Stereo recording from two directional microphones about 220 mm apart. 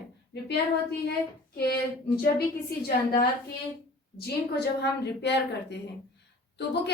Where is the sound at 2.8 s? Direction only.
40° left (ahead or behind).